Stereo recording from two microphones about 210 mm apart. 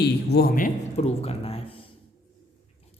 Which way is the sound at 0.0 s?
50° left (ahead or behind).